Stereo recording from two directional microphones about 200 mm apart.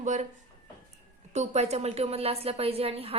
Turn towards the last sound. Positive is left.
turn(degrees=-30)  # may be behind; listen again after turning